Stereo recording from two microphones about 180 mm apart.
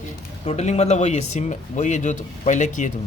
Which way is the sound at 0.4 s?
40° left (ahead or behind).